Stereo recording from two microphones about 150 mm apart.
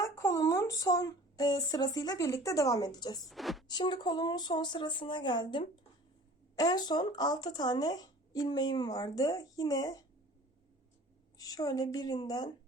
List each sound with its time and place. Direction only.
0.0 s speech: 20° left (ahead or behind)
3.2 s a woman's voice: centre (ahead or behind)
3.7 s speech: 30° left (ahead or behind)
11.3 s speech: 25° left (ahead or behind)